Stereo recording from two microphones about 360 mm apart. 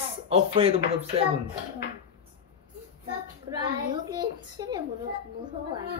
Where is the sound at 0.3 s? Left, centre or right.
Centre.